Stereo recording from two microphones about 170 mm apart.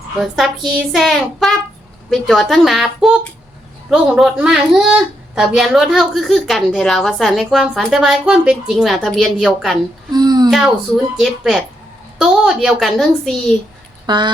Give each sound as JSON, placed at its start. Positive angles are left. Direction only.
{"t": 0.2, "sound": "a woman's voice", "side_deg": 0}
{"t": 10.1, "sound": "speech", "side_deg": -25}
{"t": 11.2, "sound": "a woman's voice", "side_deg": -5}
{"t": 14.1, "sound": "speech", "side_deg": -25}